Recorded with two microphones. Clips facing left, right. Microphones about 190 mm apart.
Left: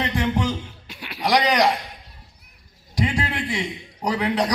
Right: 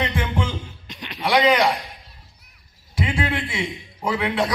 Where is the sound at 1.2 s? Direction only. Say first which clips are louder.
Right 2 dB; 40° left (ahead or behind).